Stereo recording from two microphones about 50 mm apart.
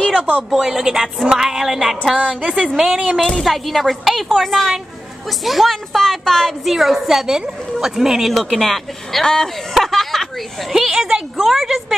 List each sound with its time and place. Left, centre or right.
0.0 s a sound: centre
0.5 s music: centre
3.2 s a woman's voice: centre
3.4 s a woman's voice: centre
6.6 s music: centre
8.3 s speech: centre
9.2 s a woman's voice: centre
9.8 s a sound: centre
10.7 s music: centre
11.3 s speech: centre